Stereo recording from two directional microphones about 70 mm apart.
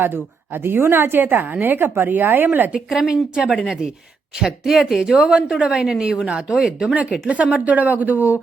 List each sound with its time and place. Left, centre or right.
0.0 s a woman's voice: right
2.7 s a woman's voice: centre; by 8.4 s right